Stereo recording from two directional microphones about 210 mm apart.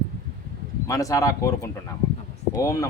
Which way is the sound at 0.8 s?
15° left (ahead or behind).